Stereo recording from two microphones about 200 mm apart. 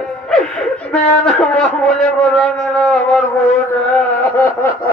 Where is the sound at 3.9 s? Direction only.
5° left (ahead or behind).